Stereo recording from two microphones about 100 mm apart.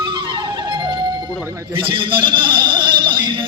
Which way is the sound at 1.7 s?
55° right (ahead or behind).